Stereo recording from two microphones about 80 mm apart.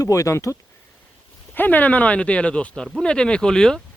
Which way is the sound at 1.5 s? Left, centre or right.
Left.